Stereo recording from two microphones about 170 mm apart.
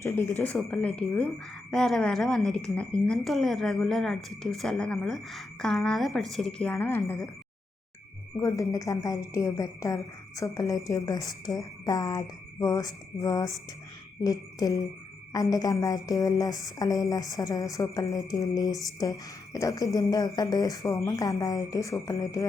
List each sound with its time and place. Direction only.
0.0 s a woman's voice: 15° left (ahead or behind)
8.4 s a woman's voice: 20° left (ahead or behind)